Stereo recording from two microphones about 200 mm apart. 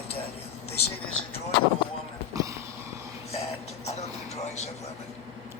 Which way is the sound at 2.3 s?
15° right (ahead or behind).